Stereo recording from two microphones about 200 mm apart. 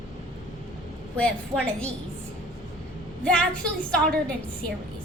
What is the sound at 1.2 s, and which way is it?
Speech, 5° left (ahead or behind).